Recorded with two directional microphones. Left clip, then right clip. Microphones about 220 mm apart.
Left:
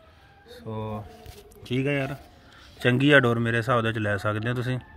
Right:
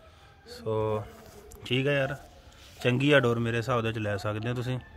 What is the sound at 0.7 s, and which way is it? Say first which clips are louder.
Speech: right 6 dB; 45° right (ahead or behind).